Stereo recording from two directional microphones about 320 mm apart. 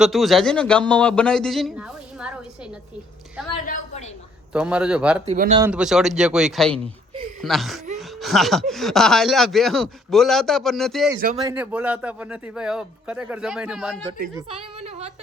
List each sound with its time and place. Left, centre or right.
0.0 s speech: centre
3.7 s a woman's voice: left
4.5 s speech: centre
5.2 s speech: right
5.6 s speech: centre
14.3 s a woman's voice: centre